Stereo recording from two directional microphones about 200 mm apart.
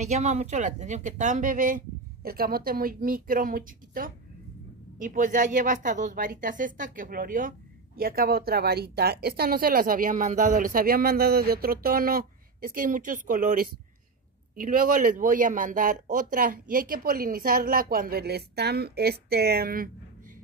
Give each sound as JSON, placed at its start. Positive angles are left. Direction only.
{"t": 0.0, "sound": "speech", "side_deg": -35}